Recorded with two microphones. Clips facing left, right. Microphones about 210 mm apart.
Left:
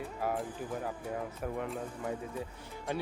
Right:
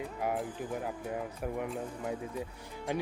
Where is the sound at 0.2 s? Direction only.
15° right (ahead or behind).